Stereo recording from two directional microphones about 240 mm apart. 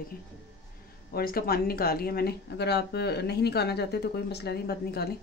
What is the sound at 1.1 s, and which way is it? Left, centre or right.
Speech, left.